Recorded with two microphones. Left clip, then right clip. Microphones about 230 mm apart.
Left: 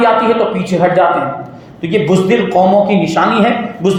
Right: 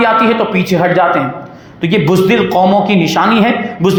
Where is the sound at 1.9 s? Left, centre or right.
Right.